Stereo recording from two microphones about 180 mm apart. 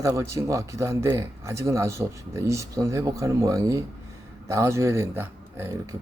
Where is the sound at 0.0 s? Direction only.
15° right (ahead or behind).